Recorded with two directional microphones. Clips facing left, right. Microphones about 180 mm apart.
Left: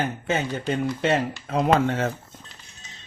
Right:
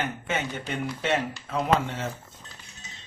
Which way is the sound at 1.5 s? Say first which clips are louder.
Left 5 dB; 55° left (ahead or behind).